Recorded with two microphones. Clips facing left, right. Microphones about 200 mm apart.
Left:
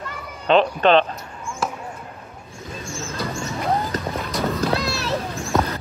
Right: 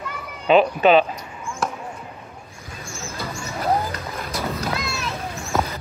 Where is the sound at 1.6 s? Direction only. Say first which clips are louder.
Even; centre (ahead or behind).